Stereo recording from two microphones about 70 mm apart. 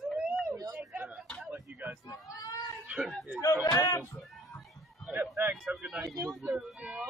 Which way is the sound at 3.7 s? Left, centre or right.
Left.